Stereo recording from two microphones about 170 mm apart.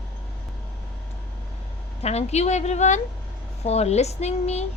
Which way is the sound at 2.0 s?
40° left (ahead or behind).